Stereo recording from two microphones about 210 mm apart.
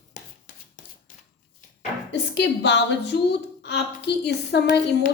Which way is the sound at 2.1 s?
55° left (ahead or behind).